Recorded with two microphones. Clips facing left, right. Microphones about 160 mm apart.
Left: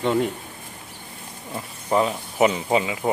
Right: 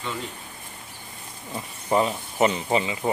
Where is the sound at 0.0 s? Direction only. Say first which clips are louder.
Left 11 dB; 60° left (ahead or behind).